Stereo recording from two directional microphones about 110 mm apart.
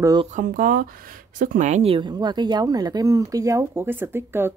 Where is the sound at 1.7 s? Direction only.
70° right (ahead or behind).